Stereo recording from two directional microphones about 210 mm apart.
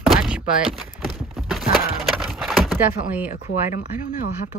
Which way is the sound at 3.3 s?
40° left (ahead or behind).